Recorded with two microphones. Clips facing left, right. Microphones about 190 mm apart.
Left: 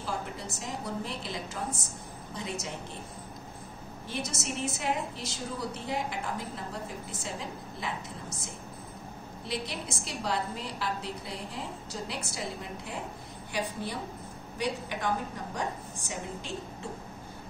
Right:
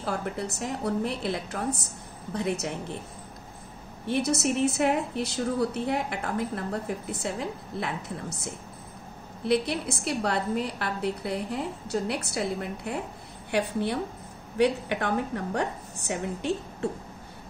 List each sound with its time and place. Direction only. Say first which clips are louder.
0.0 s a woman's voice: right 5 dB; 65° right (ahead or behind)
4.1 s a woman's voice: right 10 dB; 60° right (ahead or behind)
9.5 s a woman's voice: right 10 dB; 60° right (ahead or behind)